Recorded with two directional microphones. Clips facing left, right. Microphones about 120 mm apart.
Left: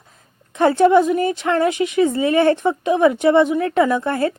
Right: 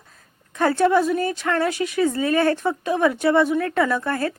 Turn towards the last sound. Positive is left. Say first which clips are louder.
# left 4 dB
turn(degrees=20)  # may be behind; listen again after turning